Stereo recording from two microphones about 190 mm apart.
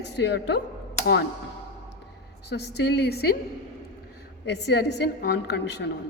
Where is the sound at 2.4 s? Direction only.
60° left (ahead or behind).